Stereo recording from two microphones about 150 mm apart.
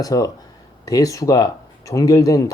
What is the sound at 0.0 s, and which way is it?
Speech, 25° left (ahead or behind).